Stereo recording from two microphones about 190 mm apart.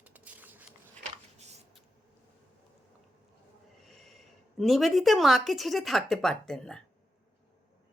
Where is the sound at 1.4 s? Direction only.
35° right (ahead or behind).